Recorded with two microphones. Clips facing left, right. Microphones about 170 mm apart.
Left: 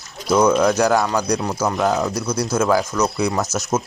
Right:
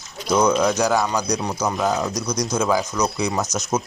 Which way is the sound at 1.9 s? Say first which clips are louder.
Left 2 dB; 5° left (ahead or behind).